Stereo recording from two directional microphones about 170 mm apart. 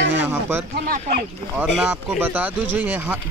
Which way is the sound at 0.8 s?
55° right (ahead or behind).